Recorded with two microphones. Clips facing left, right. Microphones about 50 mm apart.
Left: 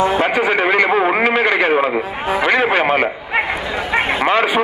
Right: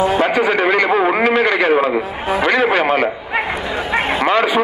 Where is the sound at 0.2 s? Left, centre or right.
Centre.